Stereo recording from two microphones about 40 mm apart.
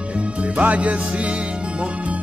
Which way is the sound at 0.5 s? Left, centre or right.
Right.